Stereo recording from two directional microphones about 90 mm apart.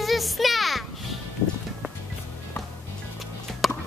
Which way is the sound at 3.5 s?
Centre (ahead or behind).